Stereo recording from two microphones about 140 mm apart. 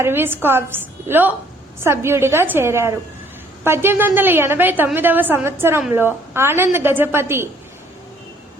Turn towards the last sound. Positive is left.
turn(degrees=-15)  # may be behind; listen again after turning